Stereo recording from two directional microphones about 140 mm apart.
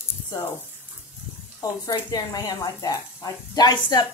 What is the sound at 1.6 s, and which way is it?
Speech, 25° left (ahead or behind).